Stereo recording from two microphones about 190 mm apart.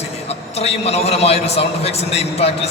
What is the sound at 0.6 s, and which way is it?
A man's voice, 35° left (ahead or behind).